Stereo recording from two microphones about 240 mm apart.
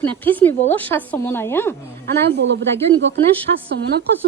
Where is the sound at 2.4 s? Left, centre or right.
Right.